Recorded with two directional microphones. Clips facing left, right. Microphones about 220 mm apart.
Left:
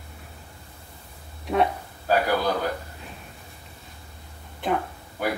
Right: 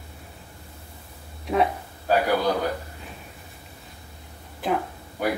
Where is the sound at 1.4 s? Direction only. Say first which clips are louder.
Even; centre (ahead or behind).